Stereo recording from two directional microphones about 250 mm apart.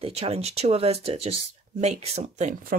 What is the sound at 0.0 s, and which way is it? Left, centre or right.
Speech, right.